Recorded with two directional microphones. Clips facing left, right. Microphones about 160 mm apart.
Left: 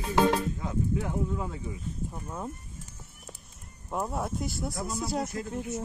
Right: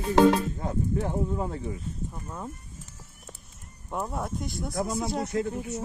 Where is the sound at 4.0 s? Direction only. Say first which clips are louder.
Even; 5° left (ahead or behind).